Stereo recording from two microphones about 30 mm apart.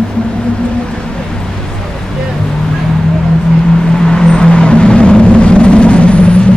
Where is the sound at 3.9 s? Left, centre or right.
Left.